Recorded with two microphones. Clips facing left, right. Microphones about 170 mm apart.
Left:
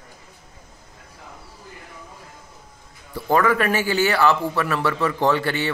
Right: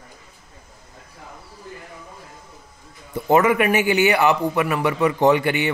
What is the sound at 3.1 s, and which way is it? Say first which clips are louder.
Speech: right 3 dB; 20° right (ahead or behind).